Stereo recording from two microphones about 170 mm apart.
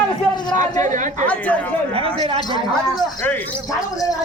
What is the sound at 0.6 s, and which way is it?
Speech, 45° right (ahead or behind).